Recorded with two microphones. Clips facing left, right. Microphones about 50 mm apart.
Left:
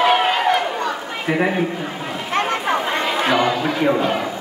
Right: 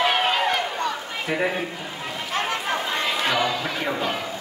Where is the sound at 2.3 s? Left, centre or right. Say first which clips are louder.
Left 6 dB; left.